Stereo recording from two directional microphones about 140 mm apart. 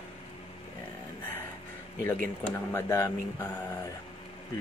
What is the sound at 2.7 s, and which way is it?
Speech, 20° left (ahead or behind).